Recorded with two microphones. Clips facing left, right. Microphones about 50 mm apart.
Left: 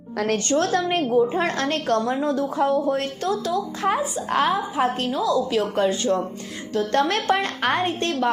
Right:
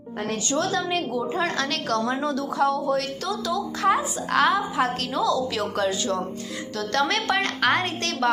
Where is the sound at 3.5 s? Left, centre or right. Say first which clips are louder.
Even; left.